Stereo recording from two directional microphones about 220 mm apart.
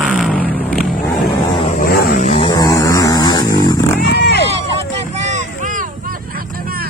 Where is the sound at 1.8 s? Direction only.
45° left (ahead or behind).